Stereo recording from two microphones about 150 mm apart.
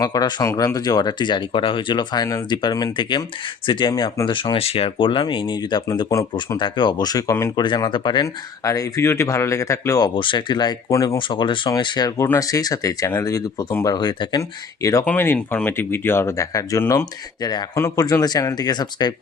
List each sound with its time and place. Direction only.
0.0 s speech: 25° left (ahead or behind)
6.6 s speech: 30° left (ahead or behind)
7.6 s speech: 30° left (ahead or behind)
10.2 s speech: 30° left (ahead or behind)
15.0 s speech: 15° left (ahead or behind)
17.4 s speech: 30° left (ahead or behind)